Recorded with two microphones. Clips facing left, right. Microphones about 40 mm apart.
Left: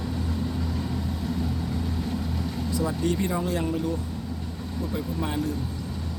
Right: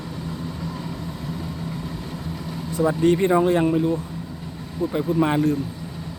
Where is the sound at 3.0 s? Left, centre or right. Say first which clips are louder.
Right 9 dB; right.